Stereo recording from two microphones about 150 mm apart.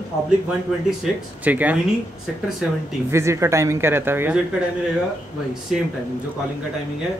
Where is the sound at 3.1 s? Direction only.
20° right (ahead or behind).